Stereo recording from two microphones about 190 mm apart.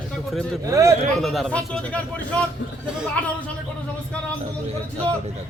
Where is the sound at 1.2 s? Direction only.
Centre (ahead or behind).